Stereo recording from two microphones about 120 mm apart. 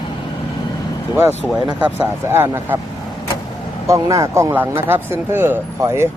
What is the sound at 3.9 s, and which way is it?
Speech, 25° right (ahead or behind).